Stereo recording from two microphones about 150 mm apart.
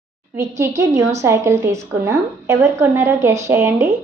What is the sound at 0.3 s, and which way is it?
A woman's voice, 20° right (ahead or behind).